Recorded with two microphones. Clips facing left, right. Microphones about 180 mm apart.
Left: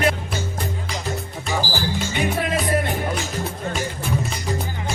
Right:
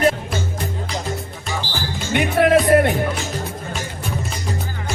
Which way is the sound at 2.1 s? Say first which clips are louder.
Right 10 dB; 65° right (ahead or behind).